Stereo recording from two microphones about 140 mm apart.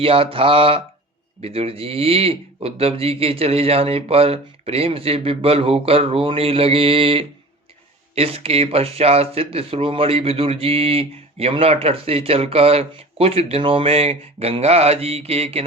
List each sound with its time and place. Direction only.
0.0 s speech: 40° right (ahead or behind)